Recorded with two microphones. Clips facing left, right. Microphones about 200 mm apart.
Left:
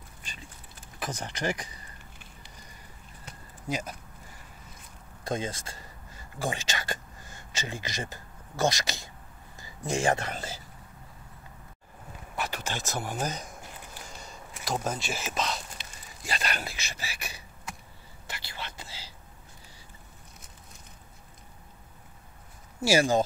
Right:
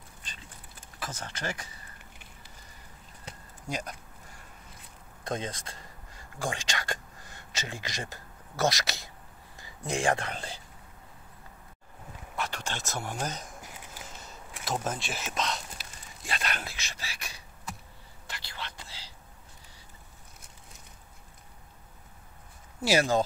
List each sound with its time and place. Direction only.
0.9 s speech: 15° left (ahead or behind)
3.6 s speech: 5° left (ahead or behind)
5.2 s speech: 5° left (ahead or behind)
12.4 s speech: 5° left (ahead or behind)
18.2 s whispering: 5° left (ahead or behind)
22.8 s speech: 5° left (ahead or behind)